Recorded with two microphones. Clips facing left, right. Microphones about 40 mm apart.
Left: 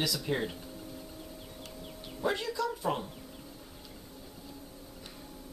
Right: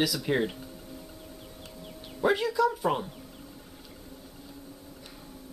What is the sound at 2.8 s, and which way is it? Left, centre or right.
Speech, centre.